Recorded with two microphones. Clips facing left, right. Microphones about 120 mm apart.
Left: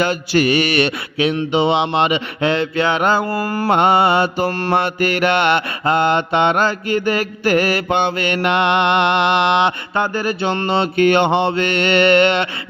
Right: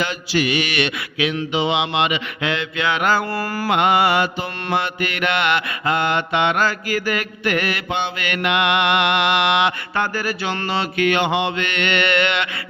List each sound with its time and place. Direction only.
0.0 s mantra: 45° left (ahead or behind); by 4.3 s 30° left (ahead or behind)
4.4 s mantra: 40° left (ahead or behind)